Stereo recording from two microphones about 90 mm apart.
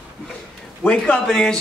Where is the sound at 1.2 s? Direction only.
5° left (ahead or behind).